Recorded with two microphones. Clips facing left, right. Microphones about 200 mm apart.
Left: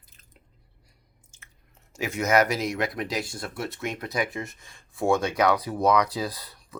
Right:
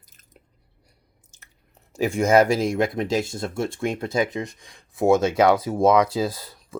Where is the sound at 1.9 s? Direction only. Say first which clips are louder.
Right 6 dB; 35° right (ahead or behind).